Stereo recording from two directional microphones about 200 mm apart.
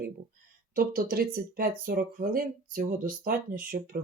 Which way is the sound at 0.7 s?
45° right (ahead or behind).